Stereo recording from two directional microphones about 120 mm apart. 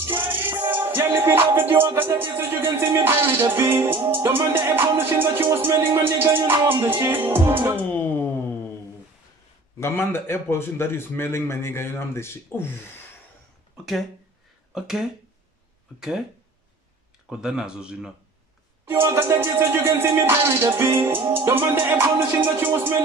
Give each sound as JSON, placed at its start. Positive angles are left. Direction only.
{"t": 0.0, "sound": "music", "side_deg": -20}
{"t": 7.9, "sound": "a sound", "side_deg": 15}
{"t": 9.8, "sound": "a man's voice", "side_deg": 20}
{"t": 14.7, "sound": "speech", "side_deg": -5}
{"t": 17.3, "sound": "speech", "side_deg": -5}
{"t": 19.0, "sound": "music", "side_deg": -20}